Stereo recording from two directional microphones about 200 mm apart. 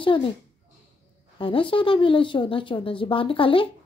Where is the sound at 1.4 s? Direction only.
25° left (ahead or behind).